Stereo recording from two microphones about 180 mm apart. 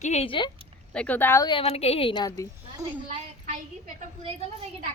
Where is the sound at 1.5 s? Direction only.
30° left (ahead or behind).